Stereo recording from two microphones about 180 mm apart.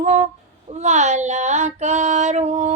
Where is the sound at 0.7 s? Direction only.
40° right (ahead or behind).